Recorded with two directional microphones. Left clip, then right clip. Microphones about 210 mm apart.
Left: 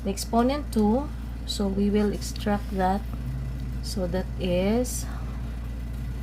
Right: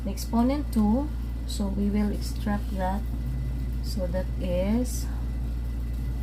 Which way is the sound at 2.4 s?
40° left (ahead or behind).